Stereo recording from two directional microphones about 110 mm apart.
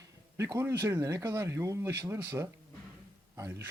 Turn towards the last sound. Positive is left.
turn(degrees=-25)  # may be behind; listen again after turning